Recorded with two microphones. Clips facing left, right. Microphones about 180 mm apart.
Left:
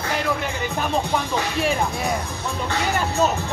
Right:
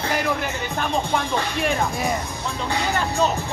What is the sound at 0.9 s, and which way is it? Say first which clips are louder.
Speech: right 1 dB; 5° left (ahead or behind).